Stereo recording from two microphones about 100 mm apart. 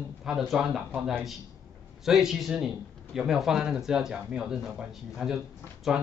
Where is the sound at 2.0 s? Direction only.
5° right (ahead or behind).